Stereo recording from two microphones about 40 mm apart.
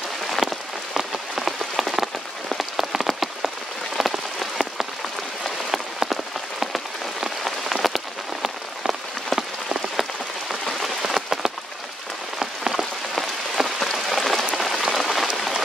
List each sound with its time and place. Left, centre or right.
0.3 s rain on surface: centre
11.1 s rain on surface: centre